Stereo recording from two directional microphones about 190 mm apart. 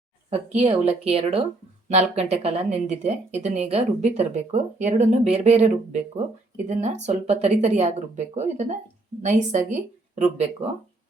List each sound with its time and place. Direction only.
0.3 s a woman's voice: 30° right (ahead or behind)